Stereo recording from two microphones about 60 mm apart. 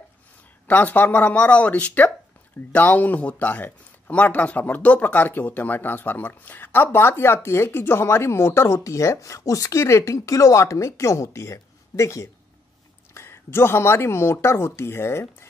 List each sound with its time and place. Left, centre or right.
0.7 s speech: left
13.1 s speech: left